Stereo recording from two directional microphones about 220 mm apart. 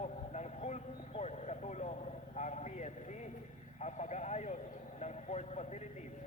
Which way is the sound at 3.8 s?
30° left (ahead or behind).